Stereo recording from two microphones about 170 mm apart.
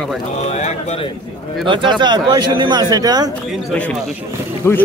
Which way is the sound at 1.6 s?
30° right (ahead or behind).